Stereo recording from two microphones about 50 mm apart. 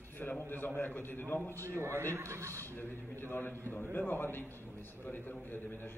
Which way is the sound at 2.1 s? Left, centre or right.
Right.